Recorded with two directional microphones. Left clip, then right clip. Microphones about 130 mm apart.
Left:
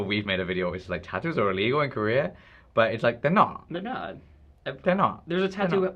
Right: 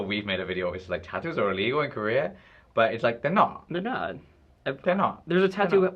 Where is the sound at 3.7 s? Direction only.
40° left (ahead or behind).